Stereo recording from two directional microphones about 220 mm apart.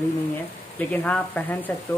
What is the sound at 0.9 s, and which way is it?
Speech, 5° left (ahead or behind).